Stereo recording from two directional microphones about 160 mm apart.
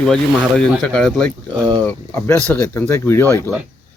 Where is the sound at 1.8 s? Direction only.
15° left (ahead or behind).